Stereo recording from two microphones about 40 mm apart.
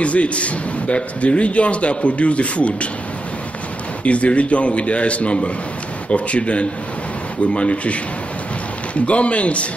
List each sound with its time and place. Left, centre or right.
0.0 s a man's voice: left
4.0 s a man's voice: left
9.0 s a man's voice: left